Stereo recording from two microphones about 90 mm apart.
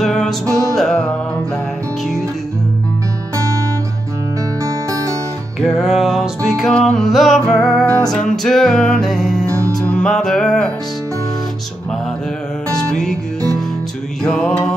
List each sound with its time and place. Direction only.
0.0 s music: 5° left (ahead or behind)
3.3 s music: 35° right (ahead or behind)
4.6 s music: 35° right (ahead or behind)
5.8 s music: centre (ahead or behind)
6.7 s music: 15° left (ahead or behind)
7.0 s music: centre (ahead or behind)
12.9 s music: 5° left (ahead or behind)
14.2 s music: 10° left (ahead or behind)